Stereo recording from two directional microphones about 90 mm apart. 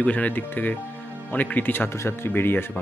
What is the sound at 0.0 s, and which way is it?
Speech, 15° left (ahead or behind).